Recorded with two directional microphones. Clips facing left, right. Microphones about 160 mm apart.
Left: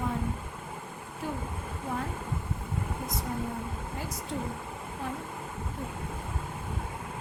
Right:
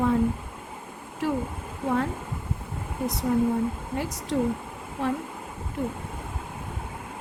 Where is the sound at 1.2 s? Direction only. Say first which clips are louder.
Right 9 dB; 90° right.